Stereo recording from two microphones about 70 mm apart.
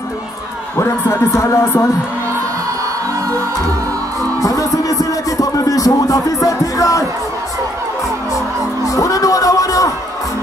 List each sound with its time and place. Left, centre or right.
0.7 s speech: left
4.4 s music: left
8.8 s speech: left